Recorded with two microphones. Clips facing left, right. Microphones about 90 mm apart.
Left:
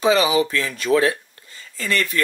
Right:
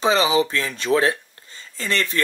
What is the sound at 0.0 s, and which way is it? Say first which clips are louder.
Speech: left 1 dB; 25° right (ahead or behind).